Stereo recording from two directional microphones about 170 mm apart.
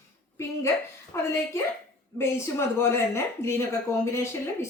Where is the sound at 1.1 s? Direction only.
15° left (ahead or behind).